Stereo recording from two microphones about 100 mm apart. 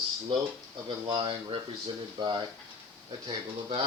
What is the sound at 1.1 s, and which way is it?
Speech, 65° right (ahead or behind).